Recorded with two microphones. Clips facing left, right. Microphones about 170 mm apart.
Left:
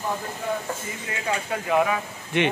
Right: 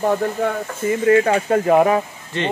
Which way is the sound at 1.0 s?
60° right (ahead or behind).